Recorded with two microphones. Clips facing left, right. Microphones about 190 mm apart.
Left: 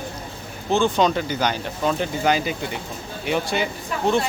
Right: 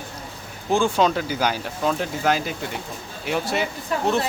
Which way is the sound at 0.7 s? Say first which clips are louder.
Left 1 dB; 10° right (ahead or behind).